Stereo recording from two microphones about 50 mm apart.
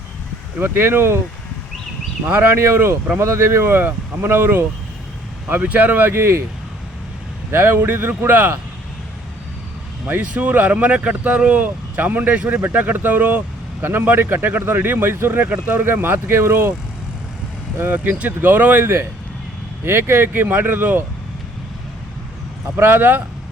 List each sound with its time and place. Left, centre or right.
0.6 s speech: right
2.2 s speech: right
5.6 s speech: right
7.5 s speech: right
10.2 s speech: right
11.6 s speech: right
17.7 s speech: right
19.8 s speech: right
22.8 s speech: right